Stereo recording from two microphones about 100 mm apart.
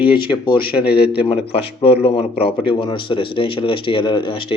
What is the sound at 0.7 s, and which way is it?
Speech, 15° right (ahead or behind).